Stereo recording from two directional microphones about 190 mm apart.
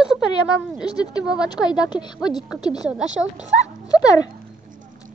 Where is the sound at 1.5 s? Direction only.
20° left (ahead or behind).